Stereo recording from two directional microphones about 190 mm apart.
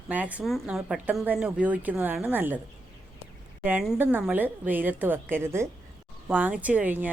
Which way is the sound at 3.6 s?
5° right (ahead or behind).